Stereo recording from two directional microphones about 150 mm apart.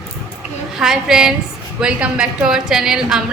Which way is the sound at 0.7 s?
Centre (ahead or behind).